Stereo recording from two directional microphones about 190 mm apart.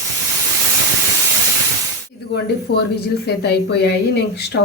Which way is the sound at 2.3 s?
60° left (ahead or behind).